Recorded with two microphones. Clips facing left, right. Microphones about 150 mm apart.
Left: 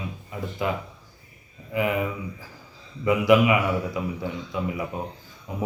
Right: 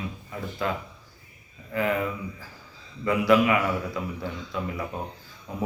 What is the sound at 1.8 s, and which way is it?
A man's voice, 15° left (ahead or behind).